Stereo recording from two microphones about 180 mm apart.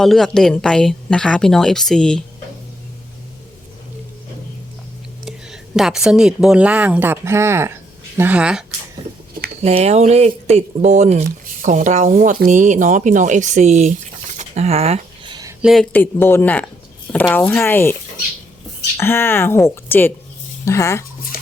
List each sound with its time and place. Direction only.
0.0 s a woman's voice: centre (ahead or behind)
5.2 s speech: centre (ahead or behind)
9.6 s speech: 35° right (ahead or behind)
14.3 s a sound: 35° right (ahead or behind)
15.6 s speech: centre (ahead or behind)
18.9 s speech: 15° left (ahead or behind)